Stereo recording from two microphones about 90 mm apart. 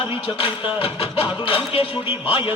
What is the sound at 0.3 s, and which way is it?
Music, 85° left.